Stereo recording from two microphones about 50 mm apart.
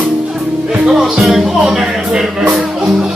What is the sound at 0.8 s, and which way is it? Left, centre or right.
Speech, centre.